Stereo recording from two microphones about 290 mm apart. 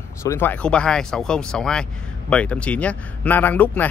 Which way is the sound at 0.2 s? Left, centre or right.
Centre.